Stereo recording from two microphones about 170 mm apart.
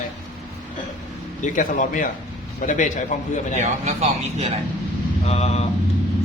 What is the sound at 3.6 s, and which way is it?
Speech, 40° right (ahead or behind).